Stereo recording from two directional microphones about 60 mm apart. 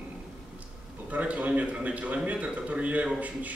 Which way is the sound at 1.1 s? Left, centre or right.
Right.